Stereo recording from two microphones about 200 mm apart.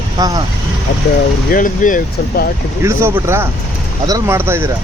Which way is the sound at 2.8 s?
15° right (ahead or behind).